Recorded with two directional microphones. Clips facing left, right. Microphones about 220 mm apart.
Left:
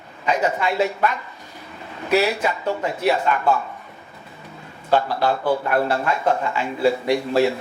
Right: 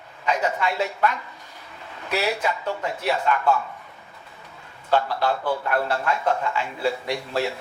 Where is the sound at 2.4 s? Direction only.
5° left (ahead or behind).